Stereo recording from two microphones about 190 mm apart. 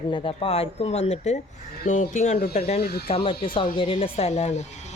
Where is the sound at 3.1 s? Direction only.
30° left (ahead or behind).